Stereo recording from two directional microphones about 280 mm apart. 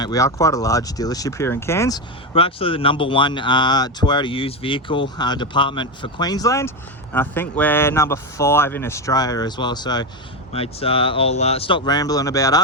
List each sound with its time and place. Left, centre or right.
0.0 s speech: centre